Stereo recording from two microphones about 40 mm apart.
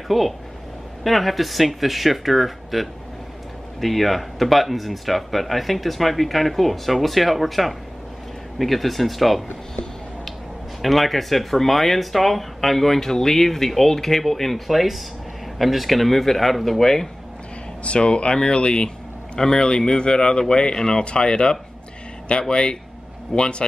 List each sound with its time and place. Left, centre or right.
0.1 s speech: centre
10.8 s speech: centre
17.8 s a man's voice: left